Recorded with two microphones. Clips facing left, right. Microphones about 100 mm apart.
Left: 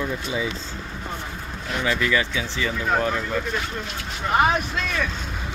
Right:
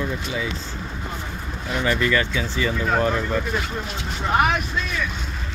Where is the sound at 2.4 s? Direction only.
5° right (ahead or behind).